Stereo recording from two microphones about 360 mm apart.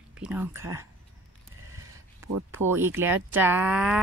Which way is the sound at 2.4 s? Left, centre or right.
Centre.